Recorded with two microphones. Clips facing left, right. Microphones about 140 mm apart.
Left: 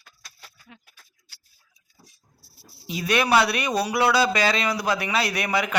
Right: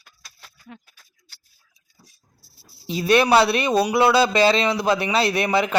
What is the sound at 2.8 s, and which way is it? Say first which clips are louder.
Speech: right 6 dB; 30° right (ahead or behind).